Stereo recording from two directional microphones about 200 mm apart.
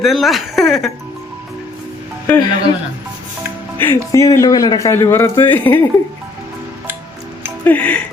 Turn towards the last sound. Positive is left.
turn(degrees=5)  # may be behind; listen again after turning